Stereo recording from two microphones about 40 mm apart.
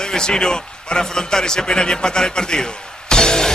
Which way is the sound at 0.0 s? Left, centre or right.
Centre.